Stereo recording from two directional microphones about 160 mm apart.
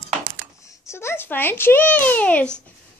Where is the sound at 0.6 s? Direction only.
15° left (ahead or behind).